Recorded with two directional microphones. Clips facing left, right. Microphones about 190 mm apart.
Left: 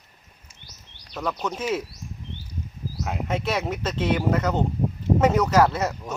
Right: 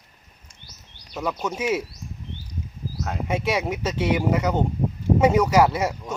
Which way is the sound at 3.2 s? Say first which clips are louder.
Right 2 dB; 10° right (ahead or behind).